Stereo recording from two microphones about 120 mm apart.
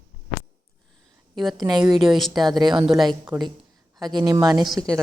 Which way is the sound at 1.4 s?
Centre (ahead or behind).